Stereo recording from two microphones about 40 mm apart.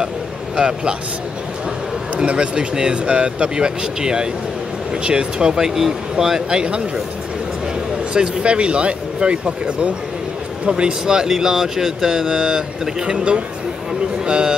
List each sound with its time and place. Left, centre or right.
0.6 s speech: right
2.1 s speech: right
5.8 s speech: centre
6.5 s speech: right
8.1 s speech: right